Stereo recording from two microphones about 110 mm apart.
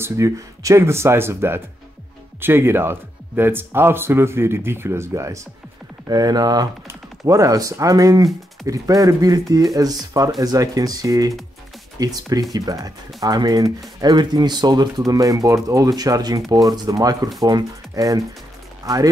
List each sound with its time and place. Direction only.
0.0 s speech: 25° right (ahead or behind)